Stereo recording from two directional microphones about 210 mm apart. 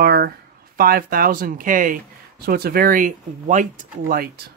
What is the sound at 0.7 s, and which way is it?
Speech, 45° right (ahead or behind).